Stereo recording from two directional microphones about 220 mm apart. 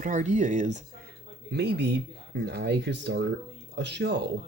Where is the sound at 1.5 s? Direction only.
50° right (ahead or behind).